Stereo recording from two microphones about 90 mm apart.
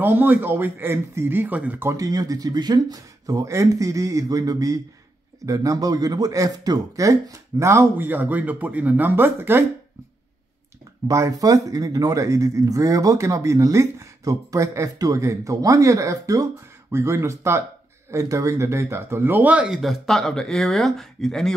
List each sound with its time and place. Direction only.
0.0 s speech: 20° right (ahead or behind)
1.9 s speech: 40° right (ahead or behind); by 9.7 s 25° right (ahead or behind)
11.1 s speech: 35° right (ahead or behind); by 21.5 s 5° left (ahead or behind)